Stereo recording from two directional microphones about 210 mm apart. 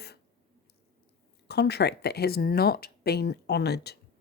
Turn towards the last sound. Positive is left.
turn(degrees=50)  # may be behind; listen again after turning